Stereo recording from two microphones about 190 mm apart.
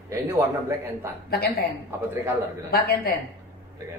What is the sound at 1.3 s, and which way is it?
Speech, 55° left (ahead or behind).